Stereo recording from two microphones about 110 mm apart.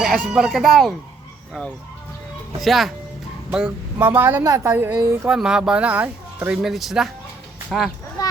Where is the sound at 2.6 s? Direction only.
Centre (ahead or behind).